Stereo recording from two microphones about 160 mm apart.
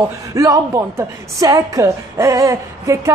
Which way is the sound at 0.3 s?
20° right (ahead or behind).